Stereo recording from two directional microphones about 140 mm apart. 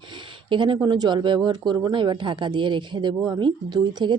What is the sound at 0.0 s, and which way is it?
Speech, 35° right (ahead or behind).